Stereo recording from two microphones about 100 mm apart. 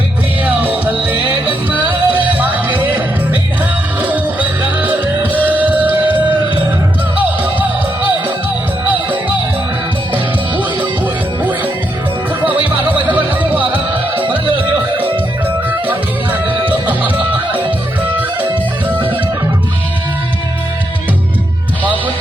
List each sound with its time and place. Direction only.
0.4 s music: 15° right (ahead or behind)
4.0 s music: 15° right (ahead or behind)
10.6 s music: 15° right (ahead or behind)
12.9 s music: 15° right (ahead or behind)
15.9 s music: 15° right (ahead or behind)